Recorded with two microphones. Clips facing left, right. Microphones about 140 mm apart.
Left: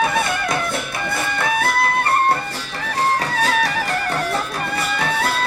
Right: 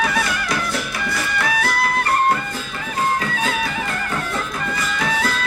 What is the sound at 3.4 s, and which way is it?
Music, 75° left (ahead or behind).